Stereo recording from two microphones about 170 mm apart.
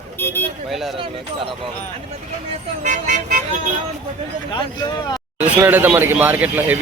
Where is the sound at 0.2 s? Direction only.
10° left (ahead or behind).